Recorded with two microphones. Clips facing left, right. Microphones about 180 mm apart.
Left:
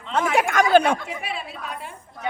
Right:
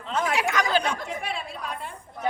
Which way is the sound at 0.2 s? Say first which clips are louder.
Left 5 dB; 50° left (ahead or behind).